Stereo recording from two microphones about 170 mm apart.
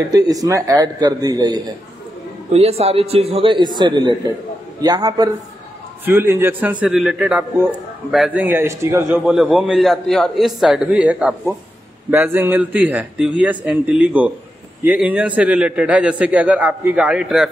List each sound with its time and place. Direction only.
0.1 s a man's voice: 20° right (ahead or behind)
2.5 s a man's voice: 35° right (ahead or behind)
6.0 s a man's voice: 15° right (ahead or behind)
9.1 s a man's voice: centre (ahead or behind)